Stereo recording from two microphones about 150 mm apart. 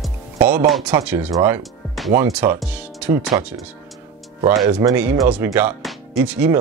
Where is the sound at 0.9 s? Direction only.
15° right (ahead or behind).